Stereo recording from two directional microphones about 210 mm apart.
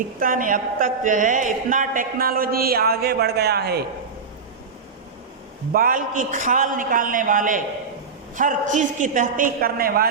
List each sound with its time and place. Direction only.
0.2 s a woman's voice: 40° right (ahead or behind)
5.7 s a man's voice: 40° right (ahead or behind)